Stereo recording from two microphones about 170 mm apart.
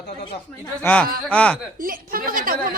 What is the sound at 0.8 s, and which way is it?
Speech, 10° left (ahead or behind).